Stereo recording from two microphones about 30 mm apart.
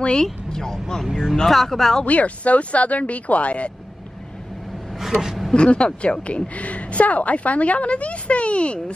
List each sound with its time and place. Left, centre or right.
0.0 s speech: left; by 2.0 s centre
2.0 s a woman's voice: left
5.5 s a woman's voice: left